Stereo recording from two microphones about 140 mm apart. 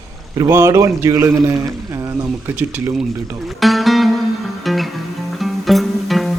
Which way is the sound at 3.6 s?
Centre (ahead or behind).